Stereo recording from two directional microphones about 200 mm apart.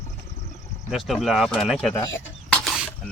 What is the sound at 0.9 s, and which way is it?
Speech, centre (ahead or behind).